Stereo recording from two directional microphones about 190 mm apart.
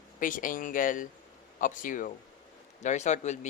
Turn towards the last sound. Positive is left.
turn(degrees=40)  # may be behind; listen again after turning